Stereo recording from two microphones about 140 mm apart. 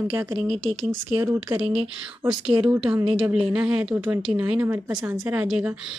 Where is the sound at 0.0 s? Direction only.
15° right (ahead or behind).